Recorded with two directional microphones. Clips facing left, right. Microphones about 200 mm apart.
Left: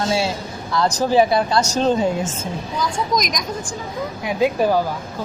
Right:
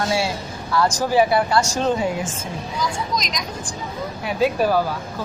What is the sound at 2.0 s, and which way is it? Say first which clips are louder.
Speech: left 3 dB; 40° left (ahead or behind).